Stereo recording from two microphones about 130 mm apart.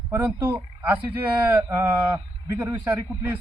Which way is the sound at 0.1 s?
15° right (ahead or behind).